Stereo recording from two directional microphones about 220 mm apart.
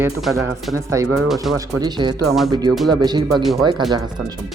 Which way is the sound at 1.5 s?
20° right (ahead or behind).